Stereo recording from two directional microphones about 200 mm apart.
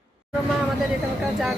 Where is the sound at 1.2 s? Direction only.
Centre (ahead or behind).